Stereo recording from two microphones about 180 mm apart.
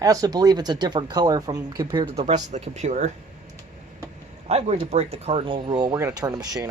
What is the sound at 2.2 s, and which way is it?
Speech, 40° right (ahead or behind).